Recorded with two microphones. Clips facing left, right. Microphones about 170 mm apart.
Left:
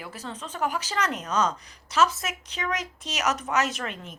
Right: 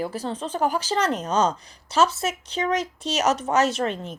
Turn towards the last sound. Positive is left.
turn(degrees=-30)  # may be behind; listen again after turning